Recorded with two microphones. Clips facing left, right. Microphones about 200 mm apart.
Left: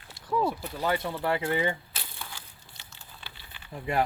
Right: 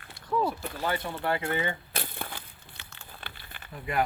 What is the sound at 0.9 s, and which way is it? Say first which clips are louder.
Speech: left 2 dB; 25° left (ahead or behind).